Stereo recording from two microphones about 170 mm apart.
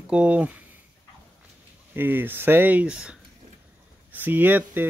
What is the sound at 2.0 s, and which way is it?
Speech, 10° right (ahead or behind).